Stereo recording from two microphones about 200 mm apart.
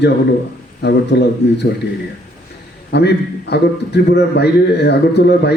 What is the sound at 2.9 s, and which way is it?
A man's voice, 55° left (ahead or behind).